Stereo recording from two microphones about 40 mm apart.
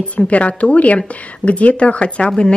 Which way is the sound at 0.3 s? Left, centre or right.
Left.